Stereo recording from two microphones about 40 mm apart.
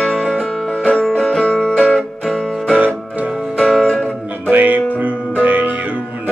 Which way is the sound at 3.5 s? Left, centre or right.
Centre.